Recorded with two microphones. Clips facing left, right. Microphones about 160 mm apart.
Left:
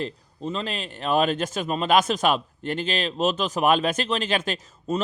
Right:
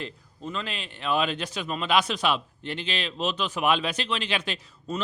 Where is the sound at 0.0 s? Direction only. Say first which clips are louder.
Left 6 dB; 35° left (ahead or behind).